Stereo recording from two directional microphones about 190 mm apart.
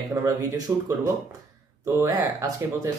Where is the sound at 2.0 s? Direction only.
15° right (ahead or behind).